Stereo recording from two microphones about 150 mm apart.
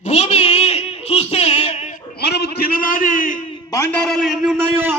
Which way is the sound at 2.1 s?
90° left.